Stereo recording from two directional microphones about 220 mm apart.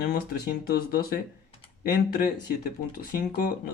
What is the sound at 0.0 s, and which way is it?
Speech, 45° left (ahead or behind).